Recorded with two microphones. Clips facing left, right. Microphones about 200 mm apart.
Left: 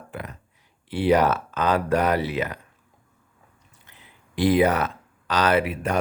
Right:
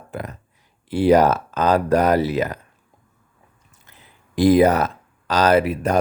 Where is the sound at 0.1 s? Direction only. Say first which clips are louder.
Right 5 dB; 40° right (ahead or behind).